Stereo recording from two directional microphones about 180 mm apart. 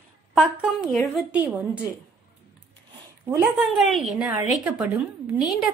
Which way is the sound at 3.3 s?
15° right (ahead or behind).